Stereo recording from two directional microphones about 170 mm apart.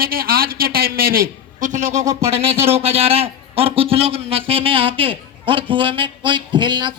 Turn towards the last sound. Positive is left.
turn(degrees=-25)  # may be behind; listen again after turning